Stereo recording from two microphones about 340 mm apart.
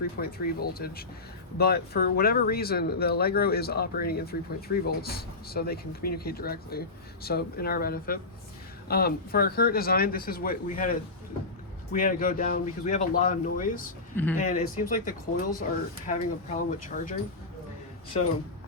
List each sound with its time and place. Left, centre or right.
0.2 s speech: left
11.9 s speech: left